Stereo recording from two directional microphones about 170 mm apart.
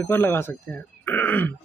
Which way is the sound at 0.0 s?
10° left (ahead or behind).